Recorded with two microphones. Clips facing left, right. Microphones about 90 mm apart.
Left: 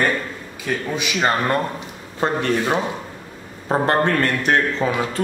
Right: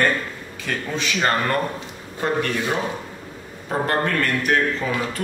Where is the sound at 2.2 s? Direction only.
30° left (ahead or behind).